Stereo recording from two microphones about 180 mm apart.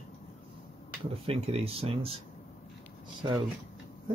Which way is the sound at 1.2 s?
35° right (ahead or behind).